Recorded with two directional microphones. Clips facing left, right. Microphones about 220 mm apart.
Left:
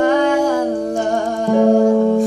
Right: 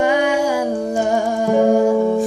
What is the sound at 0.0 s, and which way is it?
Humming, 10° right (ahead or behind).